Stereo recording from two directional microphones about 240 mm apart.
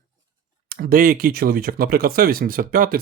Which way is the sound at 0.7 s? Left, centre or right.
Right.